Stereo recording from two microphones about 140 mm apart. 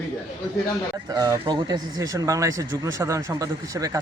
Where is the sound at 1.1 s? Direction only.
30° right (ahead or behind).